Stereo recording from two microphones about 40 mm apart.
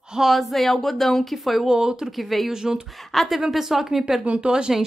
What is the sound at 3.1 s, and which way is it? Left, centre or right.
Speech, centre.